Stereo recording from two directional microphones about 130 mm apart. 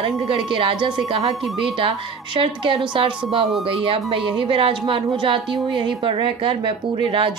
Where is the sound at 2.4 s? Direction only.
40° right (ahead or behind).